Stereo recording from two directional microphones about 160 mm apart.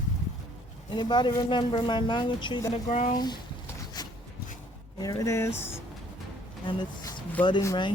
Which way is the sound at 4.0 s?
25° left (ahead or behind).